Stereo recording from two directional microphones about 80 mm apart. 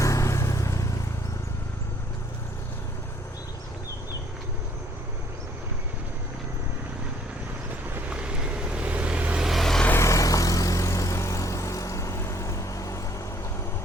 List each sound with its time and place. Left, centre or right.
0.0 s vehicle: left
8.1 s vehicle: centre
9.5 s vehicle: centre
10.0 s vehicle: left